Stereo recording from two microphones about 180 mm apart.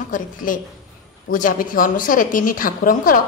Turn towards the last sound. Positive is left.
turn(degrees=50)  # may be behind; listen again after turning